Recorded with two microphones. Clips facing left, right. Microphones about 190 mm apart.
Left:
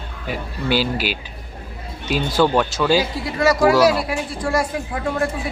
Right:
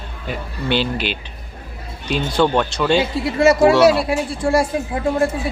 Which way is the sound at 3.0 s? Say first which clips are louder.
Right 4 dB; 25° right (ahead or behind).